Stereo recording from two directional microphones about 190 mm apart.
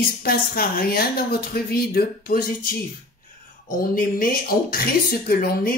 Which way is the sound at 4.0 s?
50° left (ahead or behind).